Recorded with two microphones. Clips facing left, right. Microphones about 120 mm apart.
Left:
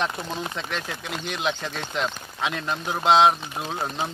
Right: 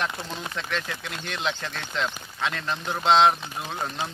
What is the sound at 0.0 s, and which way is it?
Speech, 20° left (ahead or behind).